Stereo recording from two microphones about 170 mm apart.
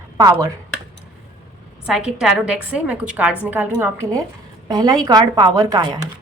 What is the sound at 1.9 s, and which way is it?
A woman's voice, 5° right (ahead or behind).